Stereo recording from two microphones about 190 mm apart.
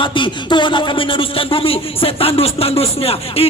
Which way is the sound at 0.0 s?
25° left (ahead or behind).